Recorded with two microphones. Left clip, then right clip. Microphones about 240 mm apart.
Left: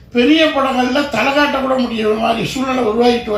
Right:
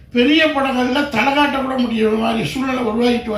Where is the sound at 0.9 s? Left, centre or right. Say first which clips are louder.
Left 1 dB; right.